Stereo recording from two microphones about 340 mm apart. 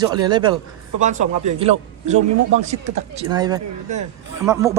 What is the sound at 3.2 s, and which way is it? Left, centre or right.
Speech, centre.